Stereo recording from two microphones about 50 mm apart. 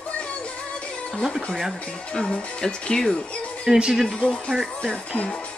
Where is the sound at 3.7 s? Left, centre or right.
Centre.